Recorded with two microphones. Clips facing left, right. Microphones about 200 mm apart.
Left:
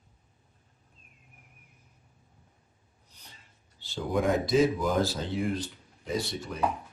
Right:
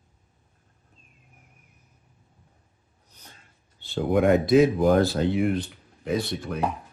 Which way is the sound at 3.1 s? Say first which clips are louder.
Right 4 dB; 45° right (ahead or behind).